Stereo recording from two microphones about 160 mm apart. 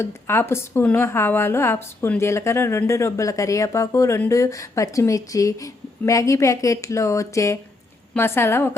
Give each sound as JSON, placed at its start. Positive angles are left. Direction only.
{"t": 0.0, "sound": "a woman's voice", "side_deg": 15}